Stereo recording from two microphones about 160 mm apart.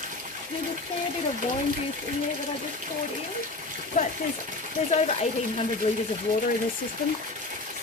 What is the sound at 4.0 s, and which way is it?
Speech, 50° left (ahead or behind).